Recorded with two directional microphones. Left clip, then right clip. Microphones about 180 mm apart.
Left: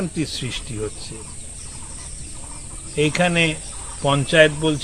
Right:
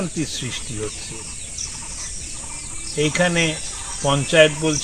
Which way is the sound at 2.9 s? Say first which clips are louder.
Left 1 dB; 25° left (ahead or behind).